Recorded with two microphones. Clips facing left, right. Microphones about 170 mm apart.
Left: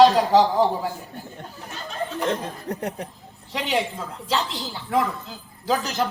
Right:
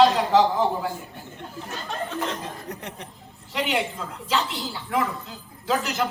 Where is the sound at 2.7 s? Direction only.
35° left (ahead or behind).